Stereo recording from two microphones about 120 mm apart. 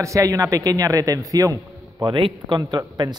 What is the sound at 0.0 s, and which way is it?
A man's voice, 25° right (ahead or behind).